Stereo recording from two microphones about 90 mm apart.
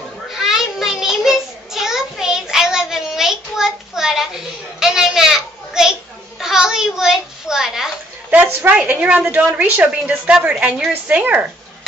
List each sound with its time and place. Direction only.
0.3 s child singing: 5° right (ahead or behind)
6.4 s a sound: 5° right (ahead or behind)
8.3 s a woman's voice: 15° right (ahead or behind)